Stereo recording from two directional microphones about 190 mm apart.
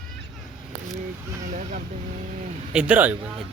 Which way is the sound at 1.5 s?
45° right (ahead or behind).